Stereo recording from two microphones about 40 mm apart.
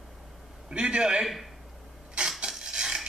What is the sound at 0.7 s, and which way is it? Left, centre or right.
Speech, right.